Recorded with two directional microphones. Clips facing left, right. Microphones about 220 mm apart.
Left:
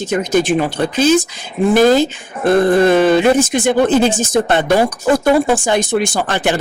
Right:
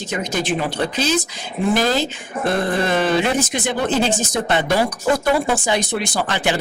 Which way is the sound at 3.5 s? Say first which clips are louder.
Left 8 dB; 50° left (ahead or behind).